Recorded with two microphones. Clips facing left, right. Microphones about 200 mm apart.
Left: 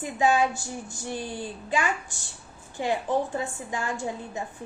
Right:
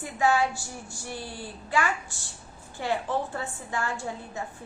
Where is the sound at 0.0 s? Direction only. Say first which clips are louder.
Left 2 dB; 20° left (ahead or behind).